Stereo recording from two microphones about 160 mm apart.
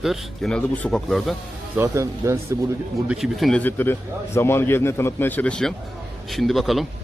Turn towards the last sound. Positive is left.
turn(degrees=0)  # may be behind; listen again after turning